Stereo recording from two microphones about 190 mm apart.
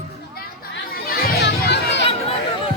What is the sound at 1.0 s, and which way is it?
Music, 60° left (ahead or behind).